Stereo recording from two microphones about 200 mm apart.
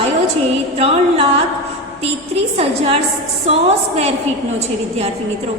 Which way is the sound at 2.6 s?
30° right (ahead or behind).